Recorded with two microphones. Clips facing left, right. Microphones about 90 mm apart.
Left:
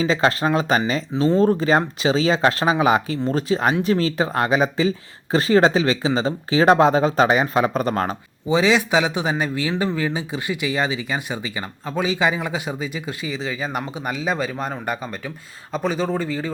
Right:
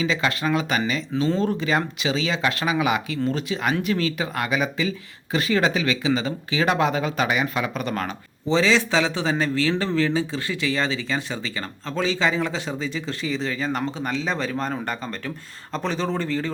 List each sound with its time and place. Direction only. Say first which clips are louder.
0.0 s speech: left 5 dB; 35° left (ahead or behind)
8.4 s speech: left 2 dB; 15° left (ahead or behind)